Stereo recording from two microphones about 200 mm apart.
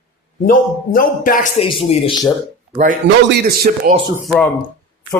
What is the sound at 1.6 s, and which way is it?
Speech, 25° left (ahead or behind).